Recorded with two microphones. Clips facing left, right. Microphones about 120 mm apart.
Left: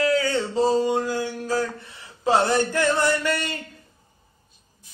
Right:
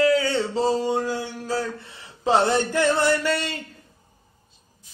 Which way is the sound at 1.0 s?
25° right (ahead or behind).